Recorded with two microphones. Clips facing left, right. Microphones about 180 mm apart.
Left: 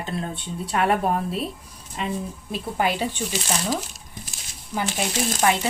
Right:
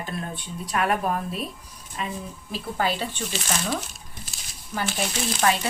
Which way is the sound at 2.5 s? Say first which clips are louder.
Left 2 dB; 15° left (ahead or behind).